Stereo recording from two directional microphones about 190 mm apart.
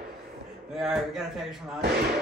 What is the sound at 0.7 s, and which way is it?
Speech, centre (ahead or behind).